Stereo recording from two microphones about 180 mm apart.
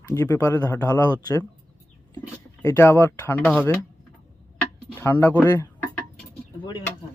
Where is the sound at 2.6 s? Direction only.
15° left (ahead or behind).